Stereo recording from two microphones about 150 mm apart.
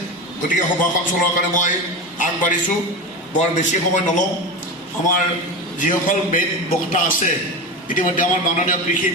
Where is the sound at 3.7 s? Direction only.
55° left (ahead or behind).